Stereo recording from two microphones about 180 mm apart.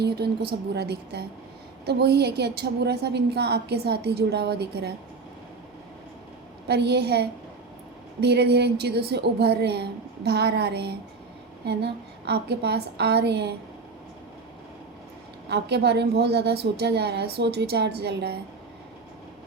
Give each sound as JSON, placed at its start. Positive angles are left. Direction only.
{"t": 0.7, "sound": "a woman's voice", "side_deg": -65}
{"t": 6.7, "sound": "a woman's voice", "side_deg": -65}
{"t": 15.4, "sound": "a woman's voice", "side_deg": -70}